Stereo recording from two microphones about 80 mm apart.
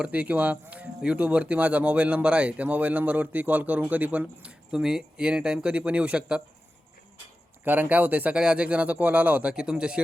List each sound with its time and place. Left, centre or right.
0.0 s speech: centre
7.6 s speech: right